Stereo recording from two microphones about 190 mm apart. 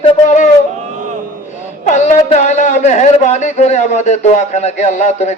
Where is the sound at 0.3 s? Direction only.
40° left (ahead or behind).